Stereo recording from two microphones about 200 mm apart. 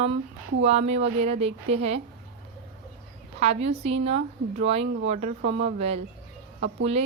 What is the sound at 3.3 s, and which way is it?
A woman's voice, 30° right (ahead or behind).